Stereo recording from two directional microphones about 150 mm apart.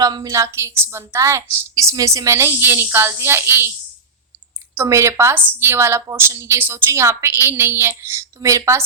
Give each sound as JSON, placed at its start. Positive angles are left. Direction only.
{"t": 0.0, "sound": "a woman's voice", "side_deg": -25}
{"t": 4.8, "sound": "a woman's voice", "side_deg": -20}